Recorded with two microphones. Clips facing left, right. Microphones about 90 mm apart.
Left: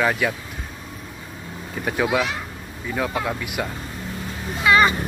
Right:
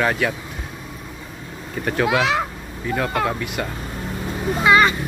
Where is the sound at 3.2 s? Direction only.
5° left (ahead or behind).